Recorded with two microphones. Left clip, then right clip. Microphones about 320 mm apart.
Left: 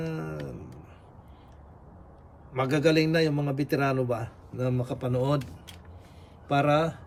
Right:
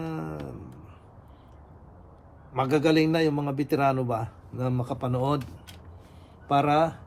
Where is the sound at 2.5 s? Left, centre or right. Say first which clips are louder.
Right 1 dB; centre.